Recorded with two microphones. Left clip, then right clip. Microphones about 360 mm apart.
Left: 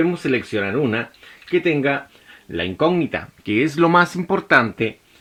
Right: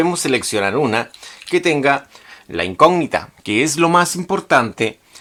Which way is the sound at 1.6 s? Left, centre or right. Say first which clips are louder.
Right 7 dB; right.